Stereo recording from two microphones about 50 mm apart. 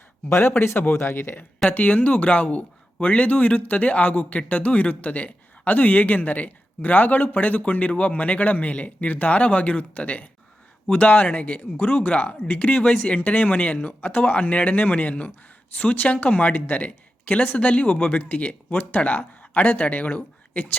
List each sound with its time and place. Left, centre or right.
0.3 s speech: left
1.7 s speech: left